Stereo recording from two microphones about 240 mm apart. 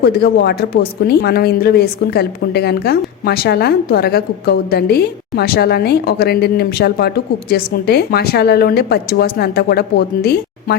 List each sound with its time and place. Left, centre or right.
0.0 s speech: left